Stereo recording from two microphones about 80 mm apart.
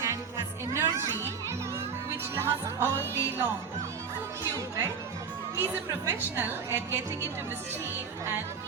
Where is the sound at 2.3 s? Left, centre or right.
Right.